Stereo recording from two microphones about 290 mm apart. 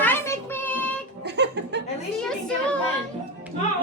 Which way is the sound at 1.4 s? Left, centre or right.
Right.